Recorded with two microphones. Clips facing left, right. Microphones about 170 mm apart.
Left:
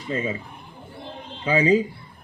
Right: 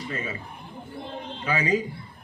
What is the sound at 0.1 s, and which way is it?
Speech, 25° left (ahead or behind).